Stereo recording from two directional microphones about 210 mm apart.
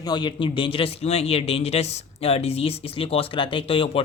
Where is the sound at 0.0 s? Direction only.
20° left (ahead or behind).